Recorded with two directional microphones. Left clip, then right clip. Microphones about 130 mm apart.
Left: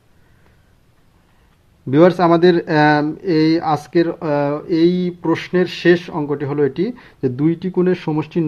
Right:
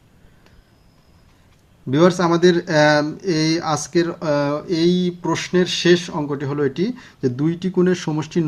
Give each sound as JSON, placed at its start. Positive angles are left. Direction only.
{"t": 1.9, "sound": "speech", "side_deg": 45}